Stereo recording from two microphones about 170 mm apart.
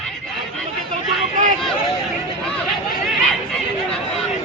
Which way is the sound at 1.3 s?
50° right (ahead or behind).